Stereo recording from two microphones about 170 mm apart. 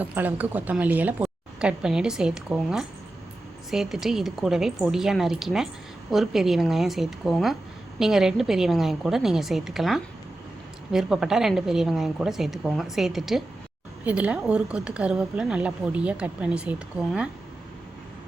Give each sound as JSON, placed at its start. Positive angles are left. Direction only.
{"t": 0.0, "sound": "a woman's voice", "side_deg": -10}